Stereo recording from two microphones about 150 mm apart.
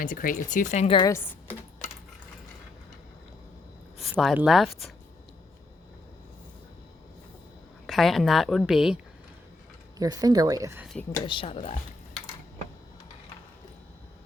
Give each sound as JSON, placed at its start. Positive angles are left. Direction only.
{"t": 0.0, "sound": "speech", "side_deg": 65}
{"t": 1.0, "sound": "speech", "side_deg": 15}
{"t": 3.9, "sound": "a woman's voice", "side_deg": 0}
{"t": 7.9, "sound": "a woman's voice", "side_deg": 0}
{"t": 10.0, "sound": "speech", "side_deg": -25}
{"t": 11.3, "sound": "speech", "side_deg": 35}